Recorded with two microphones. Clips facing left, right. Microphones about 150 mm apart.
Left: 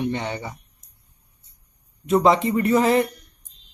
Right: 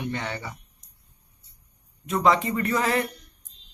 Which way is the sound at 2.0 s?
25° left (ahead or behind).